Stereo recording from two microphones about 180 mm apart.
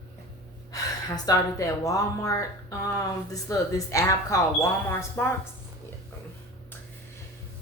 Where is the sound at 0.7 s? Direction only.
20° left (ahead or behind).